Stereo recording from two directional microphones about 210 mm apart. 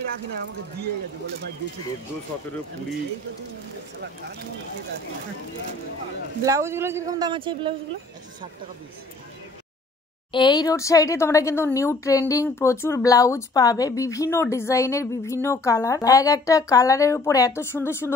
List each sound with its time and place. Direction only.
0.1 s speech: 50° right (ahead or behind)
6.4 s speech: 15° right (ahead or behind)
10.3 s speech: 20° left (ahead or behind)